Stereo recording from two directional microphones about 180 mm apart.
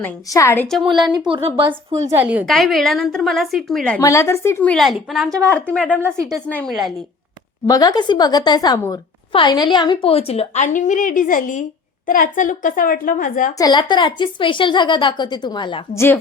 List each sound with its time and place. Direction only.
0.0 s speech: 15° left (ahead or behind)
0.8 s a woman's voice: centre (ahead or behind)
1.3 s a woman's voice: 30° right (ahead or behind)
2.0 s a woman's voice: 10° right (ahead or behind)
4.0 s a woman's voice: 15° left (ahead or behind)
7.7 s a woman's voice: 20° left (ahead or behind); by 13.5 s 50° left (ahead or behind)
13.6 s a woman's voice: 25° left (ahead or behind)